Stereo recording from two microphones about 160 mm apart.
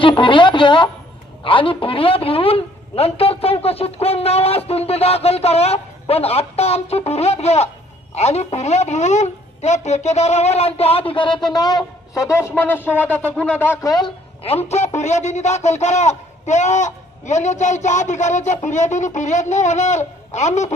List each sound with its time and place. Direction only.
0.0 s a woman's voice: 30° left (ahead or behind); by 13.7 s 10° left (ahead or behind)
13.8 s a woman's voice: 30° left (ahead or behind); by 20.7 s 45° left (ahead or behind)